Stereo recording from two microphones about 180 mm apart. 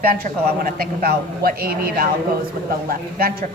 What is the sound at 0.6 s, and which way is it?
A man's voice, 55° right (ahead or behind).